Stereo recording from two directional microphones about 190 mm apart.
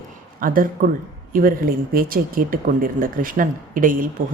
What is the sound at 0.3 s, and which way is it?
Speech, 45° right (ahead or behind).